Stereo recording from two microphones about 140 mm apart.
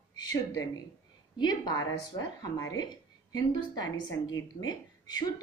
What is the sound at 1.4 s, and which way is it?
A woman's voice, 30° left (ahead or behind).